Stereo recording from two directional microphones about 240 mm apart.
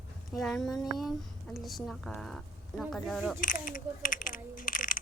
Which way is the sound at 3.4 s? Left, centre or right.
Left.